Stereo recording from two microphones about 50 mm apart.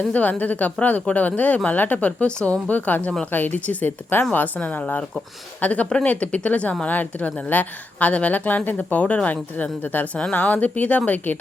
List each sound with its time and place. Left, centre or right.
0.1 s a woman's voice: left
2.6 s a woman's voice: left